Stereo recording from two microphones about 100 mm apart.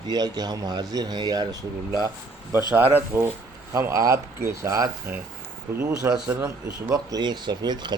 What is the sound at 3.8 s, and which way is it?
Speech, 30° right (ahead or behind).